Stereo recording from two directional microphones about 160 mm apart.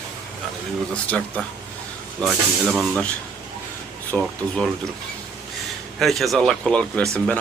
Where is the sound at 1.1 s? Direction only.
10° left (ahead or behind).